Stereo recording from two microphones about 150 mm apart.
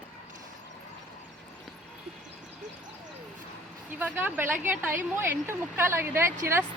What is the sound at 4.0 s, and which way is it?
A woman's voice, 15° right (ahead or behind).